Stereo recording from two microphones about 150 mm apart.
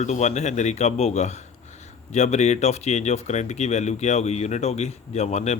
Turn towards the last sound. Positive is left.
turn(degrees=45)  # may be behind; listen again after turning